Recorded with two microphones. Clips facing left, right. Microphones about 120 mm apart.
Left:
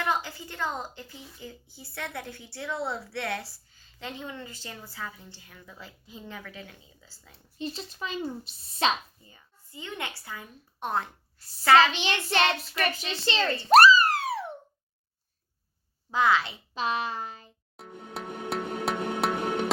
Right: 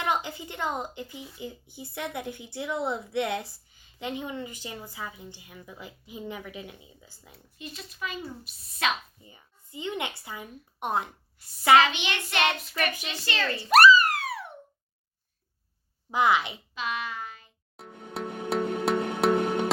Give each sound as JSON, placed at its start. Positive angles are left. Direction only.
{"t": 0.0, "sound": "speech", "side_deg": -20}
{"t": 7.6, "sound": "speech", "side_deg": 30}
{"t": 9.2, "sound": "a woman's voice", "side_deg": -20}
{"t": 11.9, "sound": "child singing", "side_deg": 35}
{"t": 13.1, "sound": "speech", "side_deg": 25}
{"t": 13.7, "sound": "a sound", "side_deg": 30}
{"t": 16.1, "sound": "speech", "side_deg": -20}
{"t": 16.7, "sound": "a sound", "side_deg": 30}
{"t": 17.7, "sound": "music", "side_deg": 0}